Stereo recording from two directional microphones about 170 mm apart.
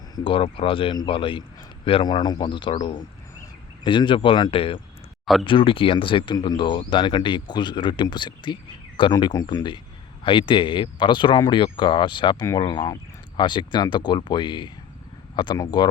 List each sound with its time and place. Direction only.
0.3 s a man's voice: 30° left (ahead or behind)
5.2 s speech: centre (ahead or behind)
5.5 s speech: 30° left (ahead or behind)